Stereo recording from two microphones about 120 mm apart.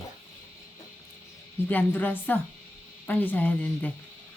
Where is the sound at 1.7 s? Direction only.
15° left (ahead or behind).